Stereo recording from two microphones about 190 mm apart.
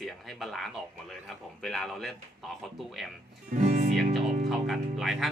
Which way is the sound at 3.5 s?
40° right (ahead or behind).